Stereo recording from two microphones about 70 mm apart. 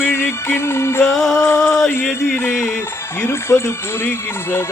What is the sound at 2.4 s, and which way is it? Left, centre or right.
Music, left.